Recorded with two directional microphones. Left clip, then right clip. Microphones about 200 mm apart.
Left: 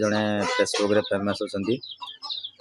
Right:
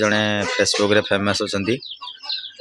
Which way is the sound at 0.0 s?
Centre (ahead or behind).